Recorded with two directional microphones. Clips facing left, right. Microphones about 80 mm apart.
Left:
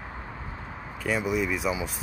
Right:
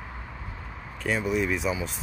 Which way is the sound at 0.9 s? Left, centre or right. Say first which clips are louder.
Even; centre.